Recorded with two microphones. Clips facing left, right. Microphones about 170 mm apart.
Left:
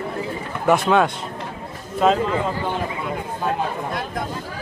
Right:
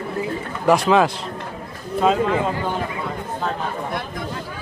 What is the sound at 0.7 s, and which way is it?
A man's voice, centre (ahead or behind).